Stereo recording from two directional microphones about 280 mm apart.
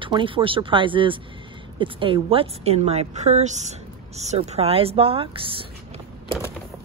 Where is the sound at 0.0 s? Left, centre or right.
Centre.